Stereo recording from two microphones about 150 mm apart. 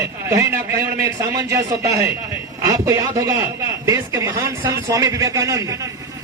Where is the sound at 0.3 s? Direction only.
20° right (ahead or behind).